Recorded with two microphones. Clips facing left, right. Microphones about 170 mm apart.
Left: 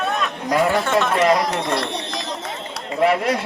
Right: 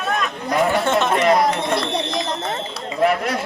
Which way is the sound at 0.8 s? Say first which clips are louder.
Right 1 dB; 25° right (ahead or behind).